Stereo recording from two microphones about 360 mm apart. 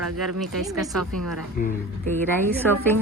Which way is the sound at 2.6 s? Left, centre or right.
Centre.